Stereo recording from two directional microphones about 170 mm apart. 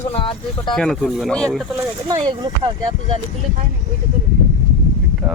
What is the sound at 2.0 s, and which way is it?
Speech, 25° right (ahead or behind).